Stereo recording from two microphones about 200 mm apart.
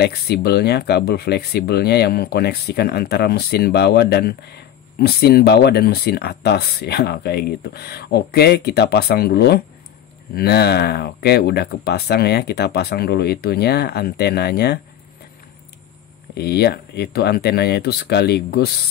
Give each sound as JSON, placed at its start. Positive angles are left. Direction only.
{"t": 0.0, "sound": "speech", "side_deg": 55}
{"t": 16.3, "sound": "speech", "side_deg": 55}